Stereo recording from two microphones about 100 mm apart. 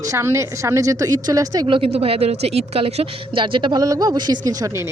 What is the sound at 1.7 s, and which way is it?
A woman's voice, 65° right (ahead or behind).